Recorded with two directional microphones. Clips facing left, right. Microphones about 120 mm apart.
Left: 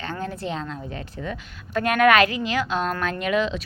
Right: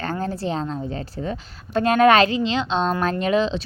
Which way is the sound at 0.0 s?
40° right (ahead or behind).